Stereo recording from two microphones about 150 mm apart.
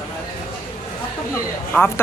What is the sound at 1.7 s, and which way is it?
Speech, 15° left (ahead or behind).